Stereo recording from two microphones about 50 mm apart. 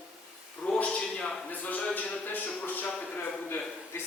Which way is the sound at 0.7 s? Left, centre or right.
Left.